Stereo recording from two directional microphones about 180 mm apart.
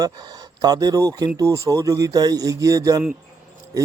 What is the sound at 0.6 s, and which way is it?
Speech, 20° right (ahead or behind).